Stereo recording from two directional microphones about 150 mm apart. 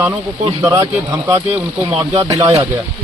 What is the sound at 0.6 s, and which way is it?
Speech, 20° right (ahead or behind).